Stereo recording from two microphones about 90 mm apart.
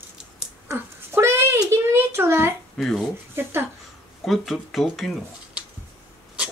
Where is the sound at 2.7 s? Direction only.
Centre (ahead or behind).